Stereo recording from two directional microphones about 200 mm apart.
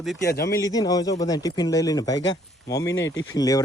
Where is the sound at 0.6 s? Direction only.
20° left (ahead or behind).